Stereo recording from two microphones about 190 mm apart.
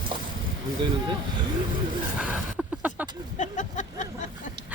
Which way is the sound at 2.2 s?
5° right (ahead or behind).